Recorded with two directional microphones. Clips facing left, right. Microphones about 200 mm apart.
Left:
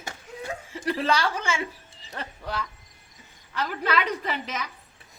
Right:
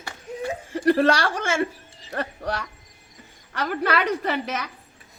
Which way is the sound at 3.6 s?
55° right (ahead or behind).